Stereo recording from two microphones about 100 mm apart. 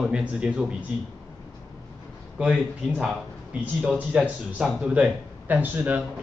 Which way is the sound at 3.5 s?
15° right (ahead or behind).